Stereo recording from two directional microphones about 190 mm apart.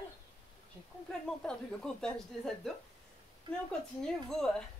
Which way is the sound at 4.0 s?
5° left (ahead or behind).